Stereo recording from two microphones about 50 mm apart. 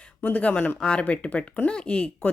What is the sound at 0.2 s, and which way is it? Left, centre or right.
Speech, left.